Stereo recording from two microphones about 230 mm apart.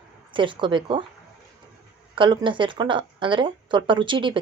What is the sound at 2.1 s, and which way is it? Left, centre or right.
A woman's voice, right.